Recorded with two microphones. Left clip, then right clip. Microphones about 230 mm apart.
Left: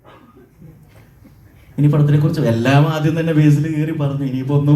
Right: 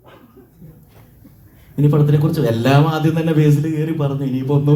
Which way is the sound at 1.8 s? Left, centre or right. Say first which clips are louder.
Right 1 dB; right.